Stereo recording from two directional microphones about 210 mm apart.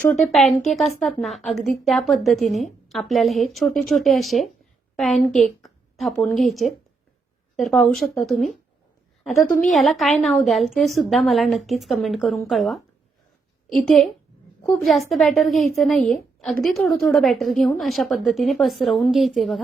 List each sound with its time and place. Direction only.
0.0 s a woman's voice: 5° left (ahead or behind)